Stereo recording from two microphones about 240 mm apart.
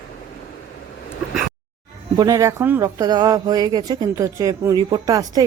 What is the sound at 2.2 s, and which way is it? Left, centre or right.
Speech, centre.